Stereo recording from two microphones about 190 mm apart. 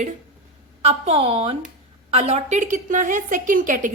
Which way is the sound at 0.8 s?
35° right (ahead or behind).